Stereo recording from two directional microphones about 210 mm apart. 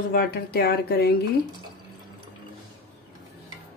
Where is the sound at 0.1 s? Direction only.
50° left (ahead or behind).